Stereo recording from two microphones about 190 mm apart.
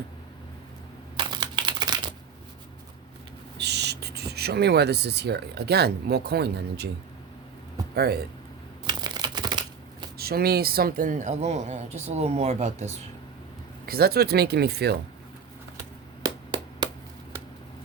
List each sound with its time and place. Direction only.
1.1 s crumpling: 25° right (ahead or behind)
3.6 s speech: 60° right (ahead or behind)
7.9 s speech: 55° right (ahead or behind)
8.9 s computer keyboard: 20° right (ahead or behind)
10.2 s speech: 55° right (ahead or behind); by 13.0 s 35° right (ahead or behind)
13.8 s speech: 55° right (ahead or behind)
16.2 s a sound: 25° right (ahead or behind)